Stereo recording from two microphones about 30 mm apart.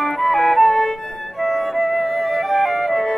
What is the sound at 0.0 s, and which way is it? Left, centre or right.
Music, centre.